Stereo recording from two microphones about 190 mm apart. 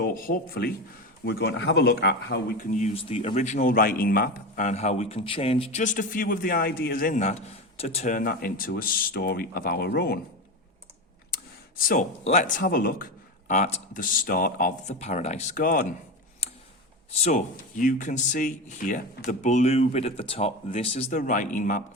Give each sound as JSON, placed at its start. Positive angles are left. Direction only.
{"t": 0.0, "sound": "speech", "side_deg": 50}
{"t": 2.6, "sound": "speech", "side_deg": 40}
{"t": 11.8, "sound": "speech", "side_deg": 45}
{"t": 14.9, "sound": "speech", "side_deg": 35}
{"t": 16.4, "sound": "tick", "side_deg": 35}
{"t": 17.2, "sound": "speech", "side_deg": 40}